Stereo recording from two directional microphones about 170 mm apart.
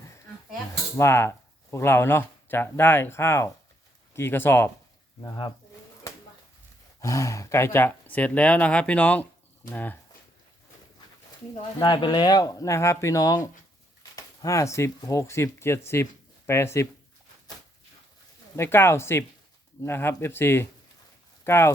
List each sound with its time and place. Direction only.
0.9 s speech: 15° left (ahead or behind)
7.0 s speech: 20° left (ahead or behind)
11.8 s speech: 25° left (ahead or behind)
18.5 s speech: 15° left (ahead or behind)